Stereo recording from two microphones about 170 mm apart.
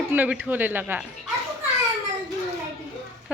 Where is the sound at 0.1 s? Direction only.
10° right (ahead or behind).